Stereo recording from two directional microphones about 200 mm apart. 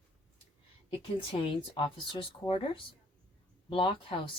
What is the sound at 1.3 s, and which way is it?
Speech, 30° left (ahead or behind).